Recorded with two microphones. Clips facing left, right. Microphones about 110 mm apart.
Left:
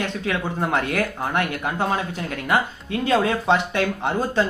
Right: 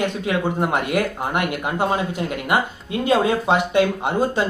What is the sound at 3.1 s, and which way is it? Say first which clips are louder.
Speech: right 1 dB; 20° right (ahead or behind).